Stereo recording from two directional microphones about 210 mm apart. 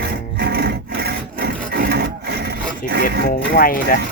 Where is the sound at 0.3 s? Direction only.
50° right (ahead or behind).